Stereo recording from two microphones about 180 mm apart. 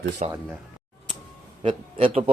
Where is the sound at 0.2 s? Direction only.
40° right (ahead or behind).